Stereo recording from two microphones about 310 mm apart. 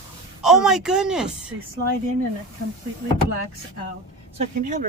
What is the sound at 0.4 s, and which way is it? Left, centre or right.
Speech, centre.